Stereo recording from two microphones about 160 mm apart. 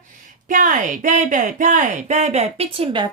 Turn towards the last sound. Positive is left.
turn(degrees=-30)  # may be behind; listen again after turning